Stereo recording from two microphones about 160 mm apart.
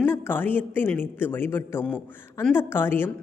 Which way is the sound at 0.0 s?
15° left (ahead or behind).